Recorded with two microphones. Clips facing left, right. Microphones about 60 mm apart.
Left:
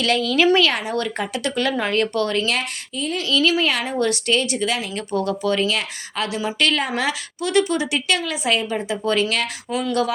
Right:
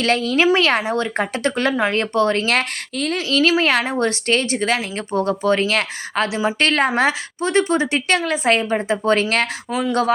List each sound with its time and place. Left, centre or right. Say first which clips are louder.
0.0 s a woman's voice: right 1 dB; right
2.5 s speech: right 4 dB; right
3.2 s a woman's voice: right 2 dB; right
6.2 s speech: right 3 dB; right
6.6 s a woman's voice: right 4 dB; right